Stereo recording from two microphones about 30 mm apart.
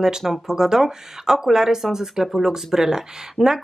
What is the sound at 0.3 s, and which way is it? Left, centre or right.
A woman's voice, centre.